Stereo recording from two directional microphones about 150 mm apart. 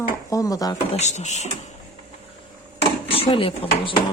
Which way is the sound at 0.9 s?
50° left (ahead or behind).